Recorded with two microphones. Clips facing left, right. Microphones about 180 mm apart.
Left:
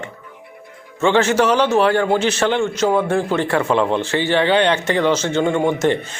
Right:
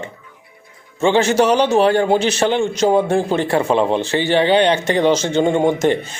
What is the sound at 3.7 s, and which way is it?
Speech, 15° right (ahead or behind).